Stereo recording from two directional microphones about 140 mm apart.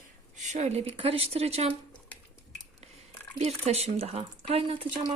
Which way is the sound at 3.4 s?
50° right (ahead or behind).